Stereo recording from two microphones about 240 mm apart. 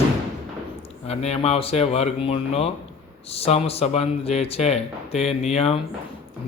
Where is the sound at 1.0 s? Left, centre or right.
Left.